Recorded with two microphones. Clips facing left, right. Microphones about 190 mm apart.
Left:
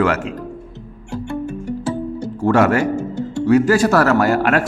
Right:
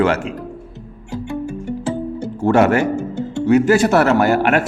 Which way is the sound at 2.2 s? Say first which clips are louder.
Right 1 dB; 25° right (ahead or behind).